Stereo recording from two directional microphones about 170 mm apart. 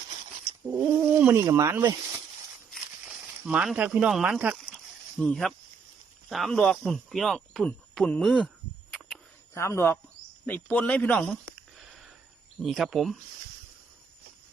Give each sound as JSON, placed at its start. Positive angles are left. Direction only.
{"t": 1.2, "sound": "speech", "side_deg": -15}
{"t": 2.7, "sound": "speech", "side_deg": -5}
{"t": 9.6, "sound": "speech", "side_deg": 15}
{"t": 12.5, "sound": "speech", "side_deg": 0}